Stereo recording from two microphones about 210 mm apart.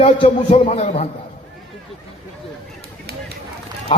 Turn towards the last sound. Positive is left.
turn(degrees=30)  # may be behind; listen again after turning